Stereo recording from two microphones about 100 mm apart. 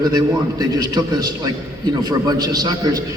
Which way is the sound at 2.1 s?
40° right (ahead or behind).